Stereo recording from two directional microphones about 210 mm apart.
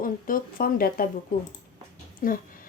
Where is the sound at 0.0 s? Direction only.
40° left (ahead or behind).